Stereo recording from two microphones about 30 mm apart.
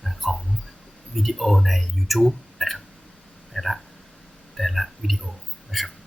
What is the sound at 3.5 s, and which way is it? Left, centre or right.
Speech, centre.